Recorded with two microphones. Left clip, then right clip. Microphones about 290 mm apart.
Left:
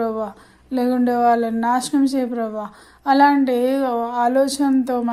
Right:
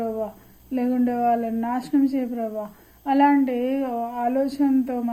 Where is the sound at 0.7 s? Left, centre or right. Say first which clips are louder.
Left 5 dB; left.